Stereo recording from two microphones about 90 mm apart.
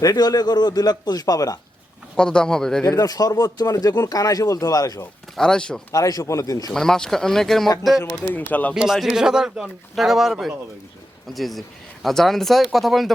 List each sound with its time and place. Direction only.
0.0 s a man's voice: 45° left (ahead or behind)
2.1 s speech: 10° left (ahead or behind)
2.8 s speech: 40° left (ahead or behind)
5.4 s speech: 10° left (ahead or behind)
5.9 s speech: 40° left (ahead or behind)
6.7 s speech: 5° left (ahead or behind)
8.3 s speech: 20° left (ahead or behind)
8.7 s speech: 5° right (ahead or behind)